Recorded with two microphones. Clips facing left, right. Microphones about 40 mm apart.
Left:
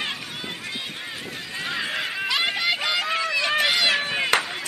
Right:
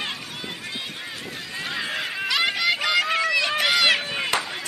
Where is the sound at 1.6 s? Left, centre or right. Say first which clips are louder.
Left 1 dB; centre.